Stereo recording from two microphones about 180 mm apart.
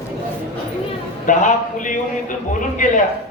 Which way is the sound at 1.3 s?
45° left (ahead or behind).